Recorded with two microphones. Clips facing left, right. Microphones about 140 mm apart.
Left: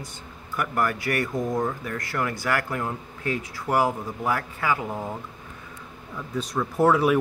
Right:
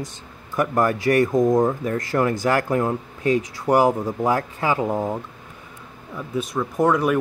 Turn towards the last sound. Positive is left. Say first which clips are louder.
# right 1 dB
turn(degrees=5)  # may be behind; listen again after turning